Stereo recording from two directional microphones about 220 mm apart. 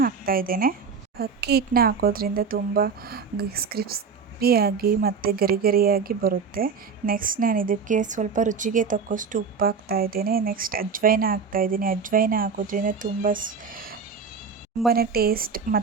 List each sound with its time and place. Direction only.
0.0 s speech: 40° right (ahead or behind)
14.9 s speech: 45° right (ahead or behind)